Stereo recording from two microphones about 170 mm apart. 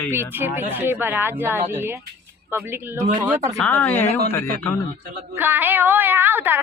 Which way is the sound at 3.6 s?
10° left (ahead or behind).